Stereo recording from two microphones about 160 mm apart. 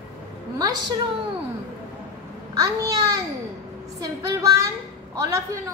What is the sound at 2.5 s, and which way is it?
Speech, 20° right (ahead or behind).